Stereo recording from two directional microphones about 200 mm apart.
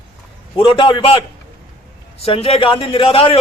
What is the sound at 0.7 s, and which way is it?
A man's voice, 25° left (ahead or behind).